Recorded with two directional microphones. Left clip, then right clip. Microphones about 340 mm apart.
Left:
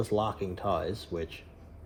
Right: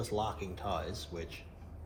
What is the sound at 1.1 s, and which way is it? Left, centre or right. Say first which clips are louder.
Speech: left 7 dB; left.